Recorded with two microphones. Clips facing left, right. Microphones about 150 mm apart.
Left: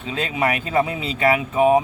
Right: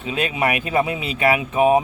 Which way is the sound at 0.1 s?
15° right (ahead or behind).